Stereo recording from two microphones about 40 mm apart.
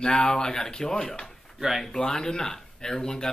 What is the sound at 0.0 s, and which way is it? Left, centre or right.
Speech, centre.